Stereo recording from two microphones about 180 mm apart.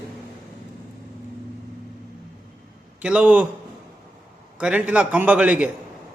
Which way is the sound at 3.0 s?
5° right (ahead or behind).